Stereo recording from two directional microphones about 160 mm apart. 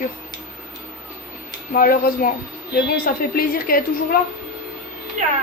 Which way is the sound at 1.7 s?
65° left (ahead or behind).